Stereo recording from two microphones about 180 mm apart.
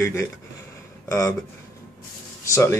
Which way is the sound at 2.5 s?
15° left (ahead or behind).